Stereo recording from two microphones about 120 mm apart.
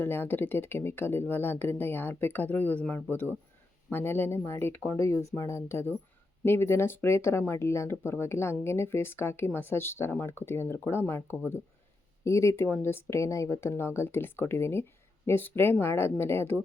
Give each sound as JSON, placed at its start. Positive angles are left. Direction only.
{"t": 0.0, "sound": "speech", "side_deg": 15}